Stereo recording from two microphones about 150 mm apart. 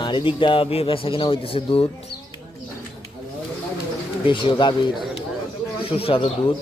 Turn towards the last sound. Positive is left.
turn(degrees=40)  # may be behind; listen again after turning